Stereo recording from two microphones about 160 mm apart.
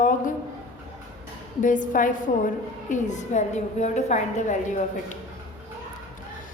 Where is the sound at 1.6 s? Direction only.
55° left (ahead or behind).